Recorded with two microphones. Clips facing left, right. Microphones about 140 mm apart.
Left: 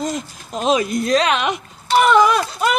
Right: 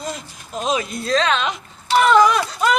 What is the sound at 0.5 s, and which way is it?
Speech, 20° left (ahead or behind).